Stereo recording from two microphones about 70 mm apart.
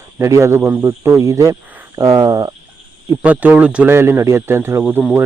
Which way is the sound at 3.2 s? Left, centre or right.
Right.